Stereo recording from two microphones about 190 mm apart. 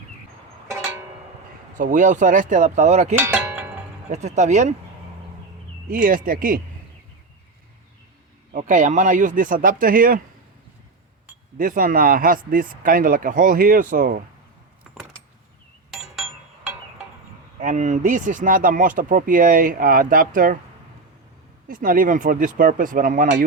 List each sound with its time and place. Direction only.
1.8 s speech: 45° right (ahead or behind)
3.2 s a sound: 10° right (ahead or behind)
4.1 s speech: 35° right (ahead or behind)
5.9 s speech: 45° right (ahead or behind)
8.5 s speech: 40° right (ahead or behind)
11.5 s speech: 45° right (ahead or behind)
17.6 s speech: 40° right (ahead or behind)
21.7 s speech: 45° right (ahead or behind)